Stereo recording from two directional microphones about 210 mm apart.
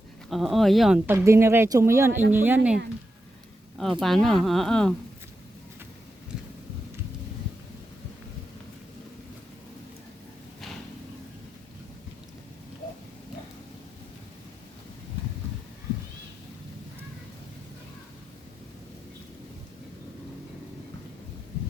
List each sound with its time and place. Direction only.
0.3 s speech: centre (ahead or behind)
3.8 s speech: centre (ahead or behind)